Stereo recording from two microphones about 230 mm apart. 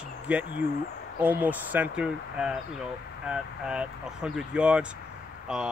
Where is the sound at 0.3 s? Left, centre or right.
Centre.